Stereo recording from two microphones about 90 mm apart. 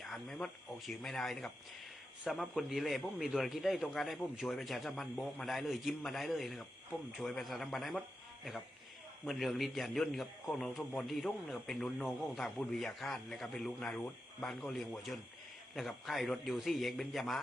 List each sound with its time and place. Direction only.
0.0 s a man's voice: 5° left (ahead or behind)
9.2 s a man's voice: centre (ahead or behind)